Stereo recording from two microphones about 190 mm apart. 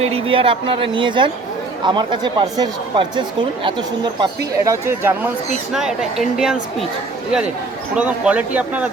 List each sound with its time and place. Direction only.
0.0 s a woman's voice: 30° right (ahead or behind); by 6.8 s centre (ahead or behind)
7.9 s speech: 5° right (ahead or behind)